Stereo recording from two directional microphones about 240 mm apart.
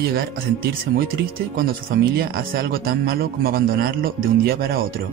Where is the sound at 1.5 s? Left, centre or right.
Right.